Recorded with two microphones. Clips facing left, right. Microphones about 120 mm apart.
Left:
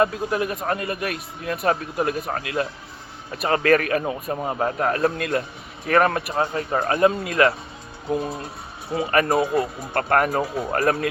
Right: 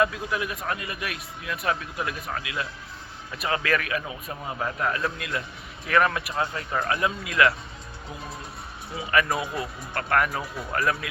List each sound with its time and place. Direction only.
0.0 s speech: 45° left (ahead or behind)
8.1 s speech: 60° left (ahead or behind)
9.0 s speech: 40° left (ahead or behind)